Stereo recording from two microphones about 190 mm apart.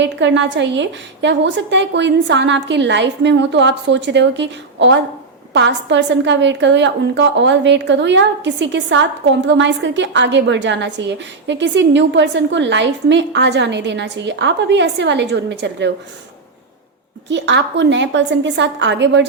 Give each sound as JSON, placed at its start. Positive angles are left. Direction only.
{"t": 0.0, "sound": "a woman's voice", "side_deg": -70}
{"t": 17.2, "sound": "a woman's voice", "side_deg": -70}